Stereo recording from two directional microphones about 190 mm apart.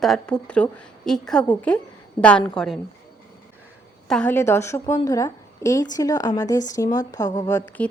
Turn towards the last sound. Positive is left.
turn(degrees=15)  # may be behind; listen again after turning